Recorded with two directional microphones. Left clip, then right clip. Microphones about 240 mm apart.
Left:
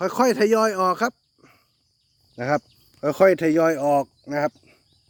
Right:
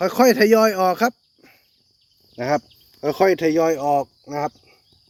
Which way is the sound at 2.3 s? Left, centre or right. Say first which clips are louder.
Right 2 dB; centre.